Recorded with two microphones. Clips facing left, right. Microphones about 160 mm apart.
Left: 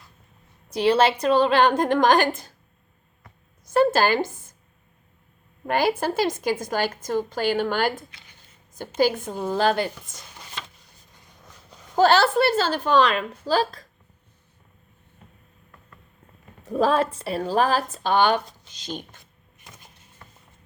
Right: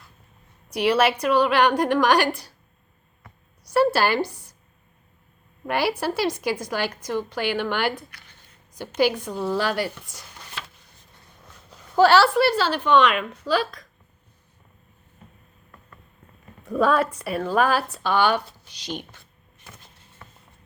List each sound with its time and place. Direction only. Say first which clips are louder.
0.7 s a woman's voice: left 1 dB; 30° left (ahead or behind)
4.2 s a woman's voice: right 1 dB; 45° left (ahead or behind)
5.6 s a woman's voice: left 2 dB; 45° left (ahead or behind)
9.6 s a woman's voice: left 3 dB; 25° left (ahead or behind)
11.9 s a woman's voice: right 1 dB; 45° left (ahead or behind)
16.6 s a woman's voice: even; 30° left (ahead or behind)
17.9 s a woman's voice: left 1 dB; 50° left (ahead or behind)